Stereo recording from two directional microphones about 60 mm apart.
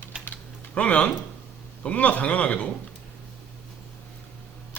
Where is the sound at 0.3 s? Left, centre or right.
Left.